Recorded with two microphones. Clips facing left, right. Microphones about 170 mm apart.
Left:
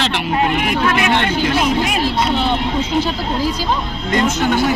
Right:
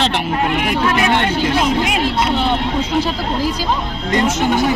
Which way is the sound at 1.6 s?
20° right (ahead or behind).